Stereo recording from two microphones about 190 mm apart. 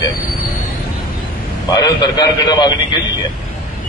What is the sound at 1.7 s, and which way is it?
A man's voice, 20° left (ahead or behind).